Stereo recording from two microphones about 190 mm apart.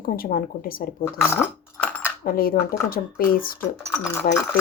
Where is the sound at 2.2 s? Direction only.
50° left (ahead or behind).